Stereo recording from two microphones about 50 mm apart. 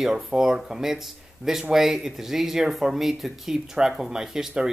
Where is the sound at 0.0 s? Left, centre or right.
Centre.